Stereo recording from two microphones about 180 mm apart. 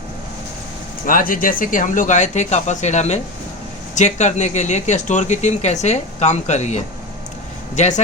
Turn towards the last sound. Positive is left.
turn(degrees=40)  # may be behind; listen again after turning